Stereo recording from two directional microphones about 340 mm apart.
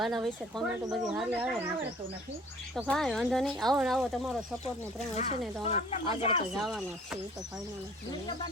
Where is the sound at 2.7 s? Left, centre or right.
Centre.